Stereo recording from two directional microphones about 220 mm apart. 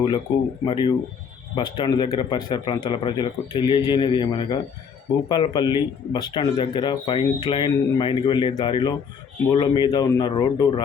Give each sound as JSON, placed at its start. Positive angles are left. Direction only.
{"t": 0.7, "sound": "speech", "side_deg": 20}